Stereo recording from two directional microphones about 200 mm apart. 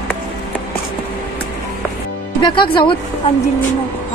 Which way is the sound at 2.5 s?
25° left (ahead or behind).